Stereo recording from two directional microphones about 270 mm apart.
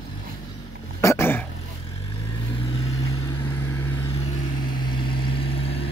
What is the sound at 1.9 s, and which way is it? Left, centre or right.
Vehicle, left.